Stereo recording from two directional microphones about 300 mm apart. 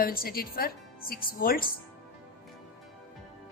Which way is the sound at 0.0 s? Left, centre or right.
Left.